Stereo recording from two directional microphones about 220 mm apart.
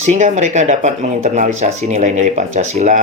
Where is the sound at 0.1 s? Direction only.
30° right (ahead or behind).